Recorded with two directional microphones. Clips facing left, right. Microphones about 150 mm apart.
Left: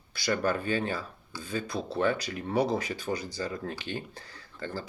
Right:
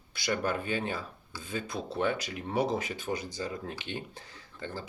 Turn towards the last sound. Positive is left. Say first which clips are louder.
# left 3 dB
turn(degrees=-20)  # may be behind; listen again after turning